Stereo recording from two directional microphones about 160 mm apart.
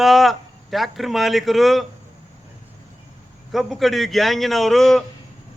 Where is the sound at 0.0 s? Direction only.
Centre (ahead or behind).